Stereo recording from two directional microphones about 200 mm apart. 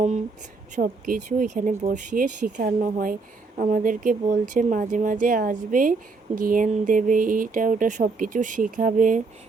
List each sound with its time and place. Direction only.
0.8 s speech: 45° right (ahead or behind)